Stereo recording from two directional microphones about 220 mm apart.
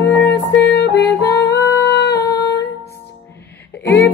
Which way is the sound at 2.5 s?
50° left (ahead or behind).